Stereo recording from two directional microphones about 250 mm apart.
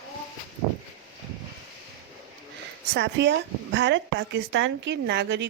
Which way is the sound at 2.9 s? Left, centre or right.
Right.